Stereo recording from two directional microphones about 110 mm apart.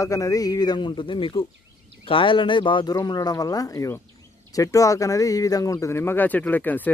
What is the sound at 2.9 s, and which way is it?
Speech, 35° left (ahead or behind).